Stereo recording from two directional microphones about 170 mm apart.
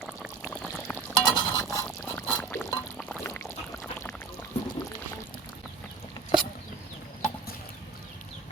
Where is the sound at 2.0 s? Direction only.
15° left (ahead or behind).